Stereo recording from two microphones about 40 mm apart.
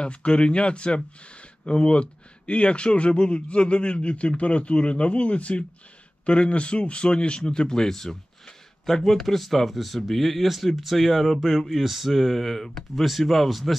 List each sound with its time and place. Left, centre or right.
0.0 s speech: left; by 13.7 s centre